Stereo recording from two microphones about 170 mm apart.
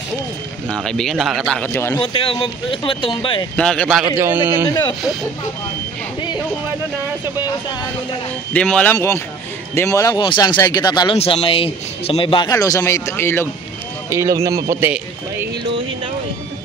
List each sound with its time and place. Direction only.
0.7 s speech: 5° left (ahead or behind)
2.0 s speech: 30° left (ahead or behind)
3.5 s speech: 5° left (ahead or behind)
4.2 s speech: 15° right (ahead or behind)
4.6 s speech: 25° left (ahead or behind)
8.5 s speech: 5° left (ahead or behind); by 11.1 s 25° left (ahead or behind)
11.1 s speech: 35° left (ahead or behind)
12.4 s speech: 20° left (ahead or behind)
14.1 s speech: 20° right (ahead or behind)